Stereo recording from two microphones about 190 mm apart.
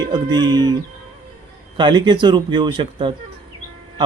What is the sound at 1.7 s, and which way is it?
Speech, 25° right (ahead or behind).